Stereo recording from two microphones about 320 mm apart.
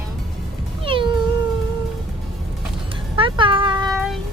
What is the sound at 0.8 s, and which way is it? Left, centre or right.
Cat, centre.